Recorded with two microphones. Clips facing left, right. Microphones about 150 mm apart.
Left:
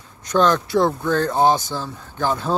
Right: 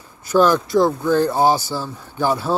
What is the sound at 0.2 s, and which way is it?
Speech, 5° right (ahead or behind).